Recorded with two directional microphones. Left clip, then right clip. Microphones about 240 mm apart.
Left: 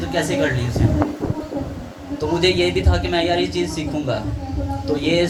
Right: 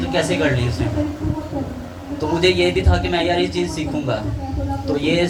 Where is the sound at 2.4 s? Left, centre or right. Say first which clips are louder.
Right 2 dB; left.